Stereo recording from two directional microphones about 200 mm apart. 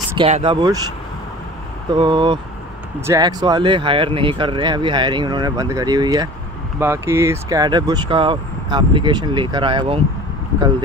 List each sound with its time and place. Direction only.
0.2 s speech: 30° right (ahead or behind)
2.0 s speech: 25° right (ahead or behind)